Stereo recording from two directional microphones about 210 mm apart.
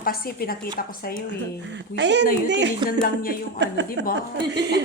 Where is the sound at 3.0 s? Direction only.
40° left (ahead or behind).